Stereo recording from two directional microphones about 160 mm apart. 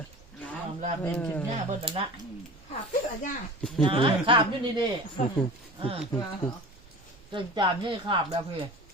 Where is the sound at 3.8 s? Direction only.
35° right (ahead or behind).